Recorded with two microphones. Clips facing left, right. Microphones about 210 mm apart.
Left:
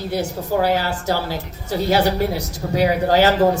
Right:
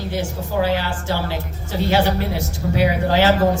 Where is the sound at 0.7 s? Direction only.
40° left (ahead or behind).